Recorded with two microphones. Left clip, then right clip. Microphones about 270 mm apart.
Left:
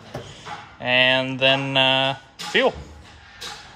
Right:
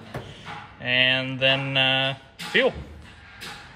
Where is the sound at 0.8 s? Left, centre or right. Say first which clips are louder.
Left 3 dB; centre.